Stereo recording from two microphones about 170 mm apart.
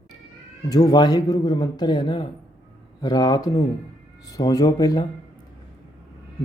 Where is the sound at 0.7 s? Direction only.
20° left (ahead or behind).